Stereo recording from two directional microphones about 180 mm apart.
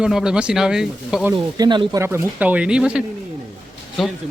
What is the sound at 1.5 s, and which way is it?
Speech, 25° right (ahead or behind).